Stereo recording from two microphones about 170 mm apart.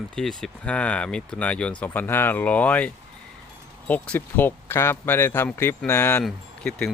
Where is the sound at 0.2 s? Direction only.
Centre (ahead or behind).